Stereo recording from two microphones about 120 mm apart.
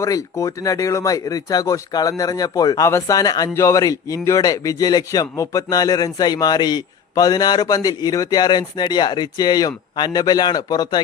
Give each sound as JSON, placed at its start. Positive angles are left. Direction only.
{"t": 0.0, "sound": "speech", "side_deg": 25}